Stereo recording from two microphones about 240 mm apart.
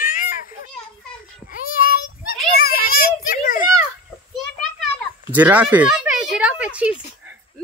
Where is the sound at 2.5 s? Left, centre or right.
Left.